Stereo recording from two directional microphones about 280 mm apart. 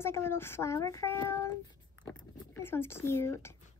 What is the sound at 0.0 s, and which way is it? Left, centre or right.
A woman's voice, centre.